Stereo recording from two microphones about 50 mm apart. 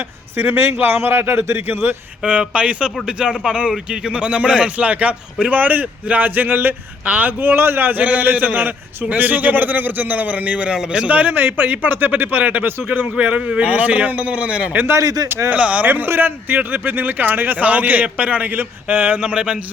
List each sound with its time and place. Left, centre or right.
0.3 s a man's voice: right
2.2 s a man's voice: right
7.0 s speech: right
15.9 s speech: right
19.2 s speech: centre